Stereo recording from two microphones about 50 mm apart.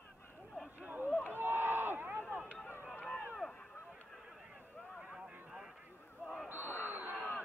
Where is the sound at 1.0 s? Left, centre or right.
Left.